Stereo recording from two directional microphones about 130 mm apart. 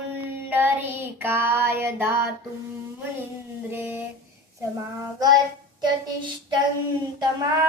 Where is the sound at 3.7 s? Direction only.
15° right (ahead or behind).